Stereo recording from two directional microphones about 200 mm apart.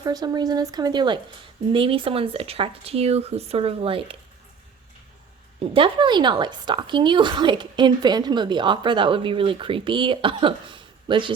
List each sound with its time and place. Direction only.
0.0 s a woman's voice: 20° right (ahead or behind)
5.5 s a woman's voice: 25° right (ahead or behind)